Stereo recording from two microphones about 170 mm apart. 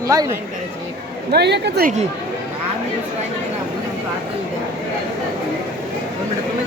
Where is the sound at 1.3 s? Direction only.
75° right (ahead or behind).